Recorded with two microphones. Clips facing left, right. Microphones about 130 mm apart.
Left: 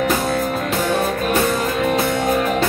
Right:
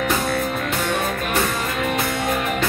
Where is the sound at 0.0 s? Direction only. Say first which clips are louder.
Left 3 dB; 35° left (ahead or behind).